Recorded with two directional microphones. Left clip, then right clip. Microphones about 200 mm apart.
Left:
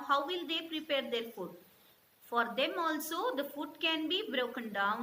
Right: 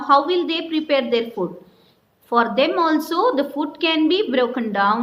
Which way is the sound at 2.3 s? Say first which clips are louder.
Right 15 dB; 45° right (ahead or behind).